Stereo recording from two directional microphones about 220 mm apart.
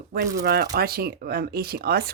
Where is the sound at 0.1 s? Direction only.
45° right (ahead or behind).